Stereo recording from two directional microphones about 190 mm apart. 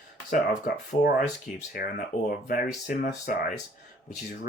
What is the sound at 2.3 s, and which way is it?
Speech, 45° left (ahead or behind).